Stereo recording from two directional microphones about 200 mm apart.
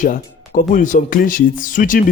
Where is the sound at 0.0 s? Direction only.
40° left (ahead or behind).